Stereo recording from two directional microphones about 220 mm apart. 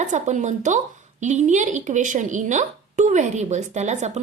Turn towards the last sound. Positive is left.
turn(degrees=-30)  # may be behind; listen again after turning